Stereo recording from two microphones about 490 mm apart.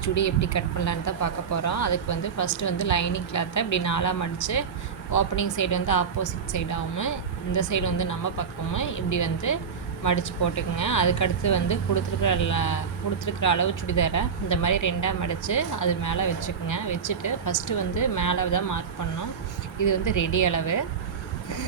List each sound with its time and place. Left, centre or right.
0.0 s a woman's voice: left
19.8 s a woman's voice: left